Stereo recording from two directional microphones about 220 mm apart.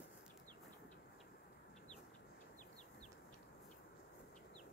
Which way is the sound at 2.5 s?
30° left (ahead or behind).